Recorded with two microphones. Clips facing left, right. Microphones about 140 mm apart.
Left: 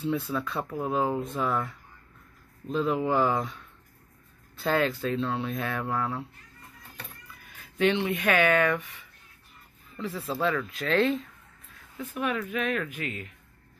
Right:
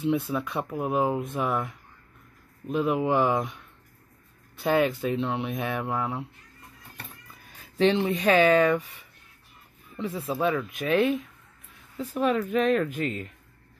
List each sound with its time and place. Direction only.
0.0 s speech: 20° right (ahead or behind)
7.5 s speech: 35° right (ahead or behind); by 11.2 s 15° right (ahead or behind)
12.0 s speech: 35° right (ahead or behind)